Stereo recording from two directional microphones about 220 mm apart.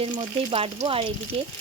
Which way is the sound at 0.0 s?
25° right (ahead or behind).